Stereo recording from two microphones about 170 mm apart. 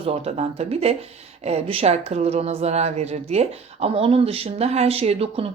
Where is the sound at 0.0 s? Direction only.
40° right (ahead or behind).